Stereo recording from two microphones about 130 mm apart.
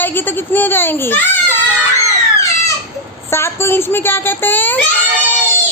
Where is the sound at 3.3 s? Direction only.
20° left (ahead or behind).